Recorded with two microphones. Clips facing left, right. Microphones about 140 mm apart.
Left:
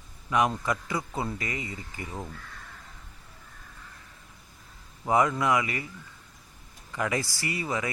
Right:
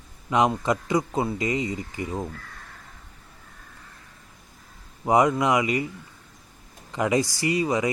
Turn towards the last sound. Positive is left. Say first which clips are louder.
# right 8 dB
turn(degrees=-20)  # may be behind; listen again after turning